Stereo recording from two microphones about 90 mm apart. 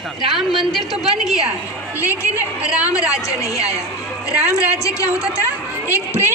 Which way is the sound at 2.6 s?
10° right (ahead or behind).